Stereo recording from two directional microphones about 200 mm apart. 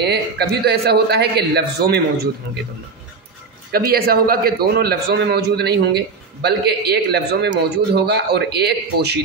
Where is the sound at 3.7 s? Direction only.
50° right (ahead or behind).